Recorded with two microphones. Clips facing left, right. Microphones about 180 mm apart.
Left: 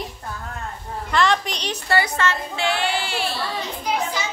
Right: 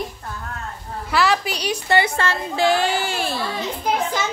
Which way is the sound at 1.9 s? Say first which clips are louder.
Right 1 dB; 30° right (ahead or behind).